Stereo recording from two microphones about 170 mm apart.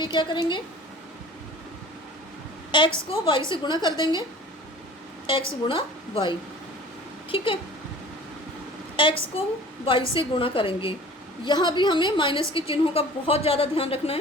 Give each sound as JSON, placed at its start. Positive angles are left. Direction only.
{"t": 0.0, "sound": "a woman's voice", "side_deg": 25}
{"t": 2.7, "sound": "a woman's voice", "side_deg": 30}
{"t": 5.2, "sound": "a woman's voice", "side_deg": 30}
{"t": 9.0, "sound": "a woman's voice", "side_deg": 30}